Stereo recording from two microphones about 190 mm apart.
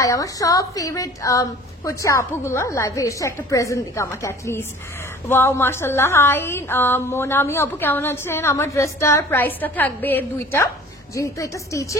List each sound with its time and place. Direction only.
0.0 s a woman's voice: 15° left (ahead or behind)